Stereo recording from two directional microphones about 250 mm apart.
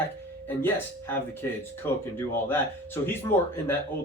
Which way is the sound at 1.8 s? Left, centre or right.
Centre.